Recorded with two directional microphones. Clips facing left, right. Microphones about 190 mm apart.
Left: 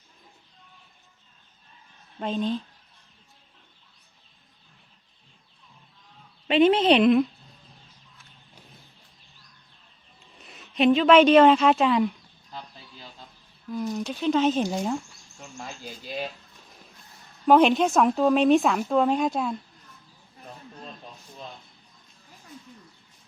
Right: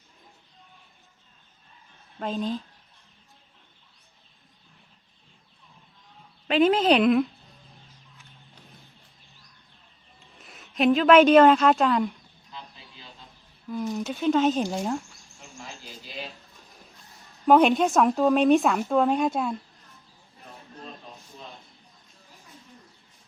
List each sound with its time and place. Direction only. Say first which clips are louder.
2.2 s speech: left 2 dB; centre (ahead or behind)
6.5 s speech: left 1 dB; centre (ahead or behind)
10.3 s a woman's voice: left 1 dB; centre (ahead or behind)
13.7 s speech: even; centre (ahead or behind)
15.4 s a sound: left 4 dB; 60° left (ahead or behind)
16.9 s a woman's voice: even; centre (ahead or behind)